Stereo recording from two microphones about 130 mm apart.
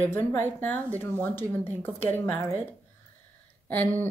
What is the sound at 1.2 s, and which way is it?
Speech, 15° left (ahead or behind).